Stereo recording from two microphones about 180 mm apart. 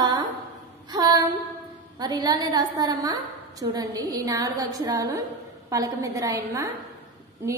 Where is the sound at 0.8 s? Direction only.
25° right (ahead or behind).